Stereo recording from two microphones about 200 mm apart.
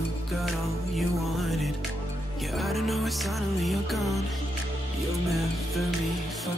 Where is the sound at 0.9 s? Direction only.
Centre (ahead or behind).